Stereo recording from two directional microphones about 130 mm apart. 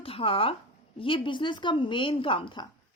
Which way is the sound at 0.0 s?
45° left (ahead or behind).